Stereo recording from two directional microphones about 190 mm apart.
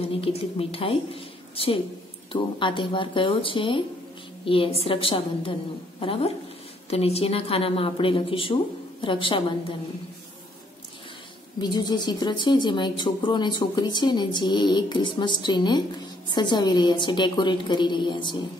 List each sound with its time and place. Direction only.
0.1 s a woman's voice: 30° left (ahead or behind)
11.6 s a woman's voice: 20° left (ahead or behind)